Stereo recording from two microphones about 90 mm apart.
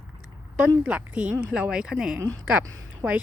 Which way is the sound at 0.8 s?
15° right (ahead or behind).